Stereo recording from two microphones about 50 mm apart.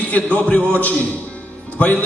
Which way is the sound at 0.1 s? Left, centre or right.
Left.